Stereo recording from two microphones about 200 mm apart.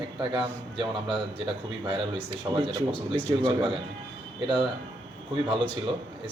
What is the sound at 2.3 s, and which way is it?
A man's voice, 25° right (ahead or behind).